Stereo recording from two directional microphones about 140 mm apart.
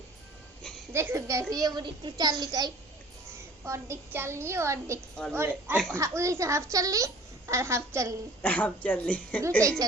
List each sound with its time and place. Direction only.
0.9 s a woman's voice: 20° right (ahead or behind)
8.4 s speech: 10° left (ahead or behind)